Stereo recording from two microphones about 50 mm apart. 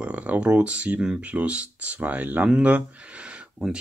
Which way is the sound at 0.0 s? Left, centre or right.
Right.